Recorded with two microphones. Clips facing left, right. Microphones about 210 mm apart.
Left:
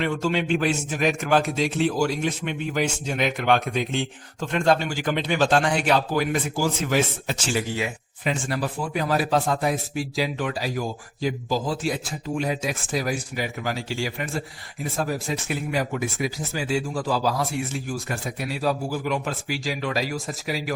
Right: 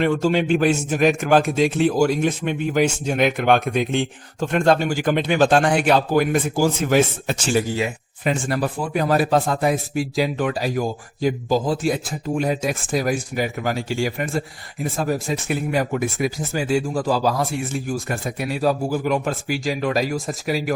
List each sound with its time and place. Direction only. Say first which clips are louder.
0.0 s a man's voice: right 5 dB; 45° right (ahead or behind)